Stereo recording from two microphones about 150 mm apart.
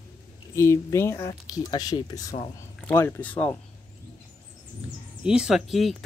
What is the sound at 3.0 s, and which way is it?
Speech, 10° left (ahead or behind).